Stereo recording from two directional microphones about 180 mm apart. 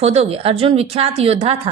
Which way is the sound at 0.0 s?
35° right (ahead or behind).